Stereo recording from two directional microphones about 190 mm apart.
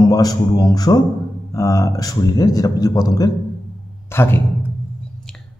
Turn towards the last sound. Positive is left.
turn(degrees=10)  # may be behind; listen again after turning